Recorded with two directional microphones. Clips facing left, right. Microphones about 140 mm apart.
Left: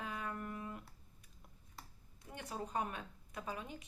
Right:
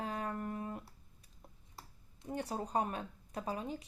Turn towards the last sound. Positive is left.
turn(degrees=-35)  # may be behind; listen again after turning